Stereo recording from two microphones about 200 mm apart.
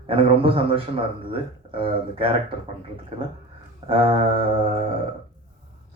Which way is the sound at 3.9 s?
25° right (ahead or behind).